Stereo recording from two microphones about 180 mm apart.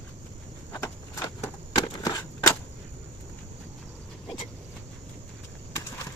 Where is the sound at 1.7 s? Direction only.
20° left (ahead or behind).